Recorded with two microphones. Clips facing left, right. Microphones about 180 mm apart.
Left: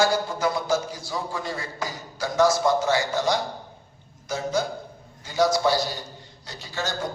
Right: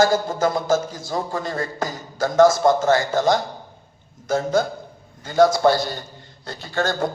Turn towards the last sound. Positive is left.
turn(degrees=-55)  # may be behind; listen again after turning